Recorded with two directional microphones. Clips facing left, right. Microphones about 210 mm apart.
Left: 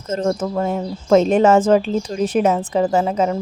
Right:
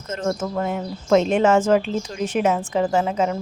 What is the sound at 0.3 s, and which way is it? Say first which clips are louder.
Speech: left 2 dB; 30° left (ahead or behind).